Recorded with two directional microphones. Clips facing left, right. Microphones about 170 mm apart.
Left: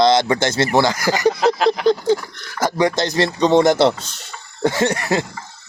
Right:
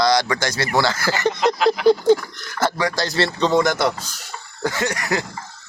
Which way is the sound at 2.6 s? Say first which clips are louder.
Left 4 dB; 15° left (ahead or behind).